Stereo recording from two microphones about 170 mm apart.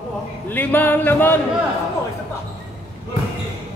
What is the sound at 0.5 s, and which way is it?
Speech, 10° left (ahead or behind).